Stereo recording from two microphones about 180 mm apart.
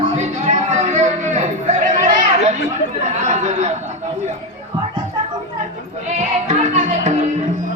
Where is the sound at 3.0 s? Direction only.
40° right (ahead or behind).